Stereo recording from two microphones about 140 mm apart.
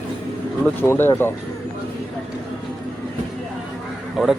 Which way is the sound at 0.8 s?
15° left (ahead or behind).